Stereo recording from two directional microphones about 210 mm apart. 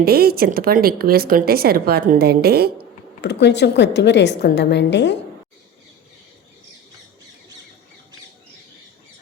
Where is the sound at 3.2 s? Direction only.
55° left (ahead or behind).